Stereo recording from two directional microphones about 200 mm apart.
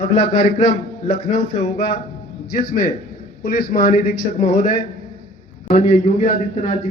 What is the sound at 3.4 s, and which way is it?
Speech, 45° left (ahead or behind).